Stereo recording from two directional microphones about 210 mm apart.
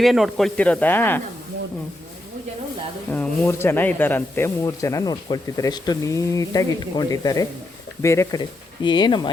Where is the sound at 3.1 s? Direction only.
10° left (ahead or behind).